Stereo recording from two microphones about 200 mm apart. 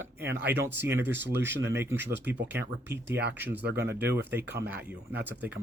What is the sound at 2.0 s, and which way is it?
Speech, 60° right (ahead or behind).